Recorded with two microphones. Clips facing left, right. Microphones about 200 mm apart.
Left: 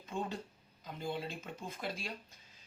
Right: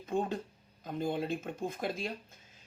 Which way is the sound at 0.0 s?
50° right (ahead or behind).